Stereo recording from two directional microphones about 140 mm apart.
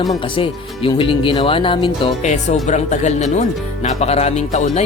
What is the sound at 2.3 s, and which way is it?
Speech, 55° left (ahead or behind).